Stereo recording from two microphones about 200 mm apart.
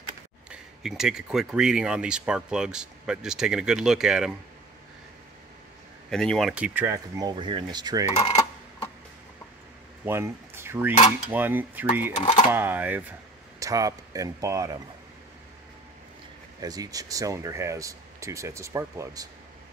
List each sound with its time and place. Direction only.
0.5 s speech: 5° right (ahead or behind)
6.0 s speech: centre (ahead or behind); by 8.1 s 20° right (ahead or behind)
10.0 s speech: 10° right (ahead or behind)
12.2 s speech: 25° left (ahead or behind)
12.4 s speech: 10° right (ahead or behind)
16.6 s speech: 20° right (ahead or behind)